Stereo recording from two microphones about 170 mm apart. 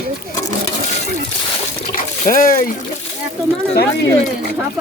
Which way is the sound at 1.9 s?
55° left (ahead or behind).